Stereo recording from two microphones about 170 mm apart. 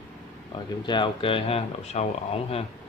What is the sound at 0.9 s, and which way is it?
Speech, 30° left (ahead or behind).